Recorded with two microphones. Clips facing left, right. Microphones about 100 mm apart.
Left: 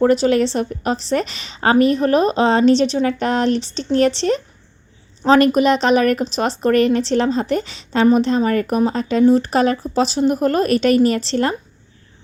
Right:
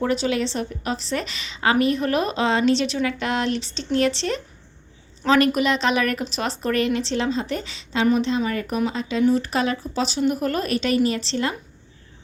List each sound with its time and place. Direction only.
0.0 s a woman's voice: 45° left (ahead or behind)
5.2 s a woman's voice: 35° left (ahead or behind)